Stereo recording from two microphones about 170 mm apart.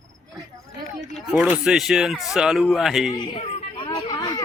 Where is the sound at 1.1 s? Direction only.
Centre (ahead or behind).